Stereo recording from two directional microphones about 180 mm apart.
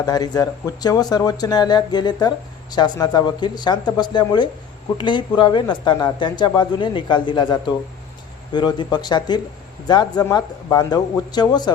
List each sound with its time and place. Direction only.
0.0 s speech: 20° left (ahead or behind)